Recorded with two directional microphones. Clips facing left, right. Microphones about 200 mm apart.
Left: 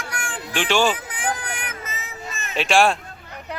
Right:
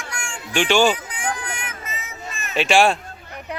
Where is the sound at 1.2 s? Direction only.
35° left (ahead or behind).